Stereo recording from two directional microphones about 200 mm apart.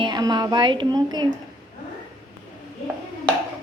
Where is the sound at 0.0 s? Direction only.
20° right (ahead or behind).